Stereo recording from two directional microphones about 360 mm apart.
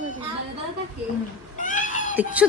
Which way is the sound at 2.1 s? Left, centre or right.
Centre.